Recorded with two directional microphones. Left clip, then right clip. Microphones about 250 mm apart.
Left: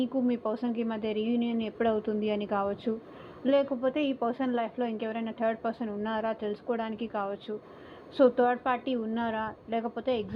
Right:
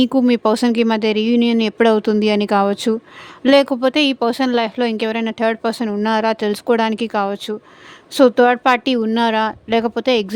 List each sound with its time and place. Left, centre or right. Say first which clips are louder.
0.0 s speech: right 15 dB; right